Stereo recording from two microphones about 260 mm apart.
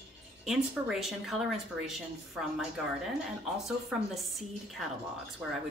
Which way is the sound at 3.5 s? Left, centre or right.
Centre.